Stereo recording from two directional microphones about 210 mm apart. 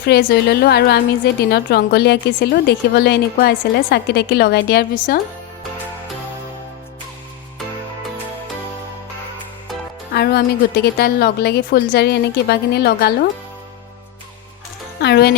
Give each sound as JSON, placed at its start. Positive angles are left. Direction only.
{"t": 0.0, "sound": "a woman's voice", "side_deg": 50}
{"t": 10.2, "sound": "a woman's voice", "side_deg": 50}
{"t": 15.0, "sound": "a woman's voice", "side_deg": 50}